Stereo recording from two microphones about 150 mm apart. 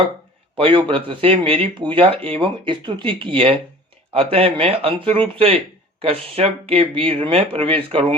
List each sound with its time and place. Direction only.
0.5 s speech: 35° right (ahead or behind)